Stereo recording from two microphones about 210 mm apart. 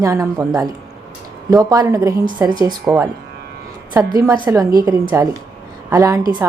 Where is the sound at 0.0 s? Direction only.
15° right (ahead or behind).